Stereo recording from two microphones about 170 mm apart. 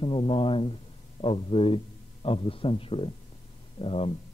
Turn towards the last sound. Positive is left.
turn(degrees=35)  # may be behind; listen again after turning